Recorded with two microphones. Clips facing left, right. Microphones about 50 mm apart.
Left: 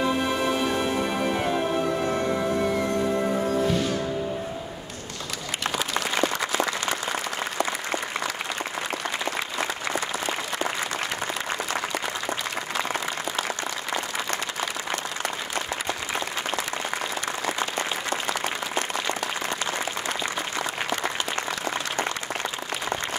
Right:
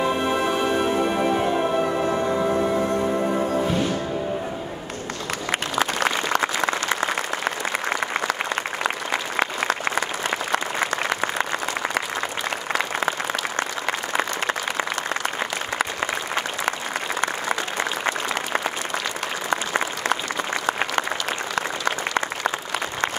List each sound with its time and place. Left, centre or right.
0.0 s music: centre
3.3 s music: right
5.8 s applause: right
20.6 s applause: right